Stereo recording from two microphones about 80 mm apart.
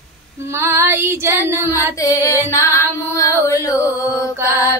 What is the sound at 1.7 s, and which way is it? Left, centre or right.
Music, left.